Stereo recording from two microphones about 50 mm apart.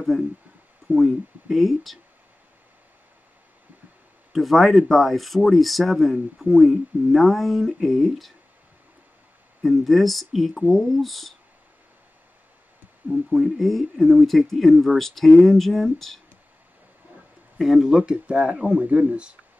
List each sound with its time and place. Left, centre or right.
0.1 s speech: centre
4.3 s speech: centre
9.6 s speech: centre
13.4 s speech: centre
17.6 s speech: centre; by 19.3 s right